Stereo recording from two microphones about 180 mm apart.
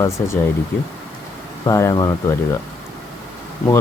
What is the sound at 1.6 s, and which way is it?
Speech, 20° left (ahead or behind).